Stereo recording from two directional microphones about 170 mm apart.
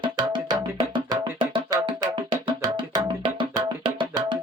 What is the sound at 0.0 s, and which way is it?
Music, 25° right (ahead or behind).